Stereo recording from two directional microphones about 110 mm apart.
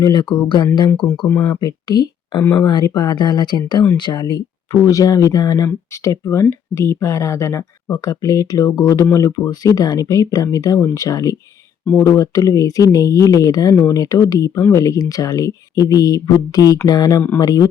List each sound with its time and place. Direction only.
0.0 s speech: 45° left (ahead or behind)